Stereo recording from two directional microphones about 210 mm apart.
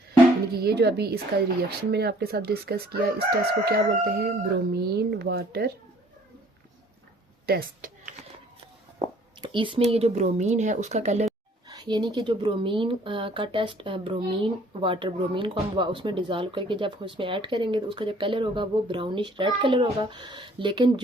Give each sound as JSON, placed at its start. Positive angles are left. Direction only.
{"t": 0.5, "sound": "chicken", "side_deg": -50}
{"t": 7.4, "sound": "speech", "side_deg": -45}
{"t": 9.0, "sound": "speech", "side_deg": -20}
{"t": 11.7, "sound": "speech", "side_deg": -20}